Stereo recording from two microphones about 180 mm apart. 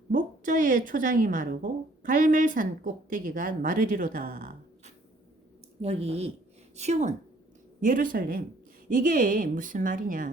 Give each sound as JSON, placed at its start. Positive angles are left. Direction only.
{"t": 0.1, "sound": "a woman's voice", "side_deg": -45}
{"t": 5.8, "sound": "a woman's voice", "side_deg": -35}